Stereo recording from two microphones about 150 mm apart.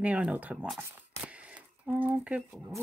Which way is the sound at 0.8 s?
10° right (ahead or behind).